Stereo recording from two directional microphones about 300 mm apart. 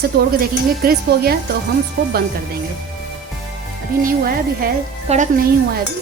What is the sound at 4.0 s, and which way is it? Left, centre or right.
A woman's voice, right.